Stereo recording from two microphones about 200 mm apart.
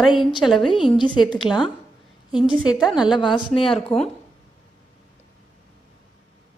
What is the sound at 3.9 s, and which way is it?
Speech, 30° left (ahead or behind).